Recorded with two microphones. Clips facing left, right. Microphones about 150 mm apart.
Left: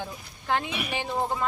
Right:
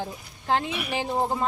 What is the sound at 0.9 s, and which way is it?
Speech, 35° right (ahead or behind).